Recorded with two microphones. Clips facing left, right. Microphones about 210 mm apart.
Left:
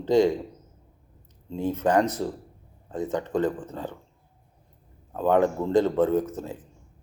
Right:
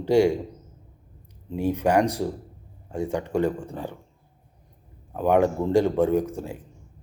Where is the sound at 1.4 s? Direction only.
15° right (ahead or behind).